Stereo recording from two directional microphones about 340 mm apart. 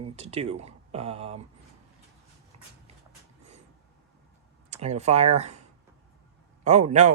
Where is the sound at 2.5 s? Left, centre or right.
Centre.